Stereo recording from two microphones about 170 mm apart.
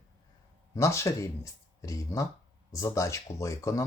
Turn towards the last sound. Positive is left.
turn(degrees=20)  # may be behind; listen again after turning